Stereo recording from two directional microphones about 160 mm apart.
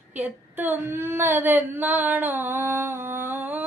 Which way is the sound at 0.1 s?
10° right (ahead or behind).